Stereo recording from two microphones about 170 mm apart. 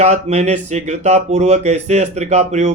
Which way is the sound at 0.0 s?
40° right (ahead or behind).